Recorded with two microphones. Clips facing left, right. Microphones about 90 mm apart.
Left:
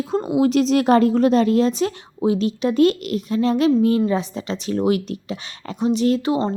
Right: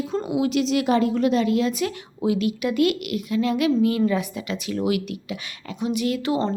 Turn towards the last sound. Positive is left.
turn(degrees=30)  # may be behind; listen again after turning